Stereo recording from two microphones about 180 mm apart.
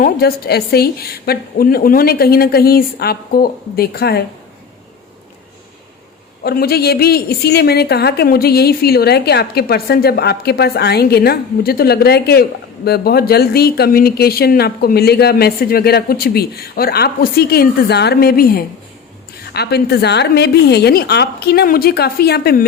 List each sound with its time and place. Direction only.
0.0 s a woman's voice: 60° left (ahead or behind)
6.4 s a woman's voice: 60° left (ahead or behind)